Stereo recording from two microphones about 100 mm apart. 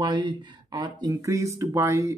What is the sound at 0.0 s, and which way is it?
Speech, 50° right (ahead or behind).